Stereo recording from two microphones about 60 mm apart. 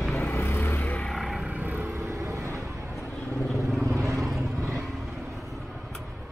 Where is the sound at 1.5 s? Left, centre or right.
Right.